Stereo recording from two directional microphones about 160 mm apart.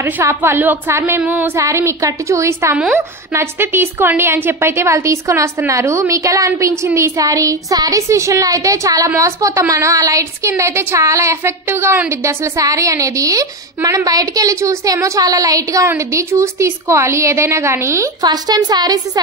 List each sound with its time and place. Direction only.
0.0 s a woman's voice: 15° right (ahead or behind)